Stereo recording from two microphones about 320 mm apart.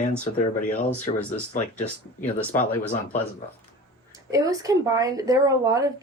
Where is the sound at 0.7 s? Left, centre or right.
Left.